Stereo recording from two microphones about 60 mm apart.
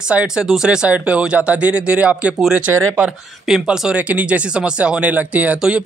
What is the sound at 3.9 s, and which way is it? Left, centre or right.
Speech, right.